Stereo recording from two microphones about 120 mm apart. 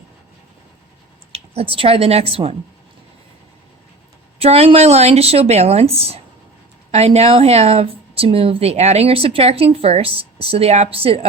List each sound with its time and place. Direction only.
1.3 s speech: 50° right (ahead or behind)
4.4 s a woman's voice: 60° right (ahead or behind)